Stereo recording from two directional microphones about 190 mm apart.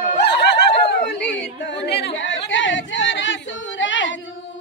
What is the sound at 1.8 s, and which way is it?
Chatter, 60° left (ahead or behind).